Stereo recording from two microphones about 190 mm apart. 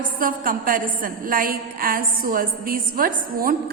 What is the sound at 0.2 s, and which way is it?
A woman's voice, 45° right (ahead or behind).